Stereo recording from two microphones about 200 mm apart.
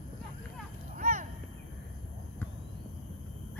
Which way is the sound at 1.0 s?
45° right (ahead or behind).